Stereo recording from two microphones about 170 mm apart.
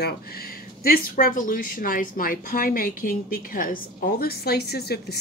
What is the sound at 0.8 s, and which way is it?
A woman's voice, 60° left (ahead or behind).